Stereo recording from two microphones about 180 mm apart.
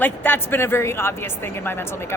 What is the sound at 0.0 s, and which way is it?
Speech, 10° left (ahead or behind).